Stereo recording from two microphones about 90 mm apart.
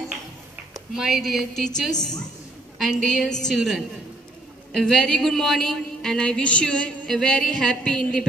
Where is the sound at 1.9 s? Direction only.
45° left (ahead or behind).